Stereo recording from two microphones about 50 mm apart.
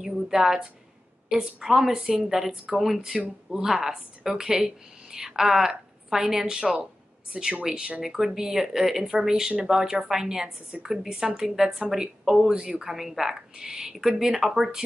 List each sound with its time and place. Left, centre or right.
0.0 s a woman's voice: centre
12.8 s speech: centre